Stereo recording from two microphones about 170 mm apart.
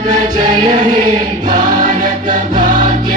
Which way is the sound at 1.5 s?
50° right (ahead or behind).